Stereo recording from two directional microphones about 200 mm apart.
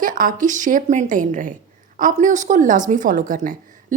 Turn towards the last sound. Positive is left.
turn(degrees=-40)  # may be behind; listen again after turning